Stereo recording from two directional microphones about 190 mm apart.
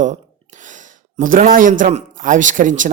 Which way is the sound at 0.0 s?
40° right (ahead or behind).